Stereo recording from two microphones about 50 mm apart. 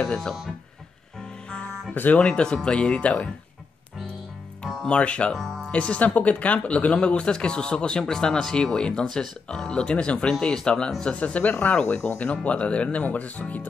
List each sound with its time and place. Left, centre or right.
2.1 s speech: centre
4.8 s speech: left